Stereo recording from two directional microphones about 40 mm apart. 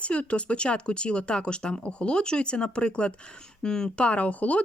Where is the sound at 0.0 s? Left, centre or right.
Left; by 4.0 s centre.